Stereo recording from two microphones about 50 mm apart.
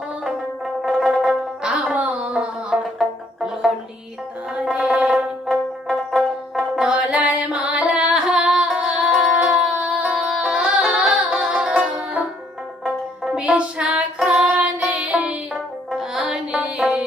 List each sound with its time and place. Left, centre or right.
0.3 s music: centre
1.7 s music: right
3.0 s music: centre
4.9 s music: right
6.5 s music: centre
9.7 s music: right
13.2 s music: centre
15.5 s music: centre